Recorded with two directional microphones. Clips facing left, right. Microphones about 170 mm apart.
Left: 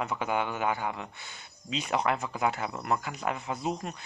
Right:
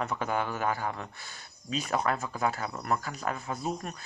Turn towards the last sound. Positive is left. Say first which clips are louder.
# left 1 dB
turn(degrees=20)  # may be behind; listen again after turning